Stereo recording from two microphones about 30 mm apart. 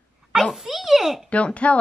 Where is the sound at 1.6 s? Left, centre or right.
Left.